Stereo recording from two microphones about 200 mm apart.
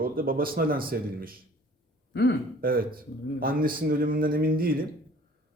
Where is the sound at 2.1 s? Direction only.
60° left (ahead or behind).